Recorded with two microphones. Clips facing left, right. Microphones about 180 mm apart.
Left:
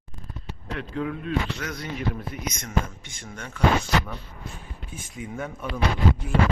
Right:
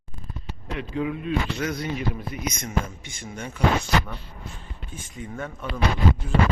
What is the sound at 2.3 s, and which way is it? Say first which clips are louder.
Speech: right 2 dB; 5° right (ahead or behind).